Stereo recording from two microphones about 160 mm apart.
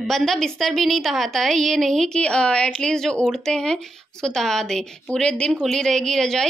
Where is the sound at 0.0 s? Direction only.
Centre (ahead or behind).